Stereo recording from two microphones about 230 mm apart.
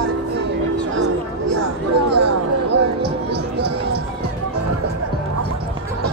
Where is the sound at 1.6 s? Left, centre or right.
Right.